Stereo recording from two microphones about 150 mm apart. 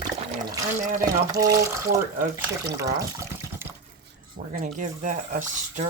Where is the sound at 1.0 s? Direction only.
25° right (ahead or behind).